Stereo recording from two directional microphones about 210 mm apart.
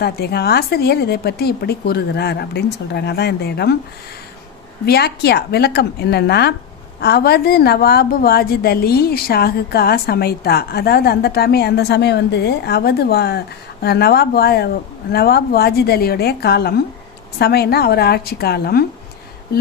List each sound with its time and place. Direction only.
0.0 s a woman's voice: 50° left (ahead or behind)
4.9 s a woman's voice: 50° left (ahead or behind)